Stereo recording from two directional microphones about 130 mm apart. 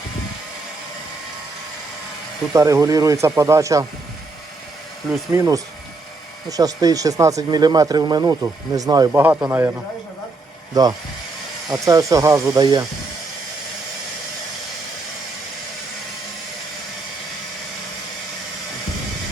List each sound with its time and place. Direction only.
2.5 s speech: 25° right (ahead or behind)
5.3 s speech: 25° right (ahead or behind)
9.1 s speech: 15° right (ahead or behind)
10.8 s speech: 30° right (ahead or behind)